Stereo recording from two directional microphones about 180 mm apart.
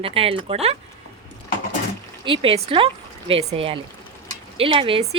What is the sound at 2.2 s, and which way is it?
Speech, 30° right (ahead or behind).